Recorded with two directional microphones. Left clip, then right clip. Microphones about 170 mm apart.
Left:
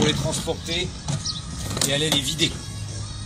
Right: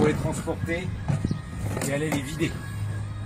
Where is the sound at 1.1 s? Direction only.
Centre (ahead or behind).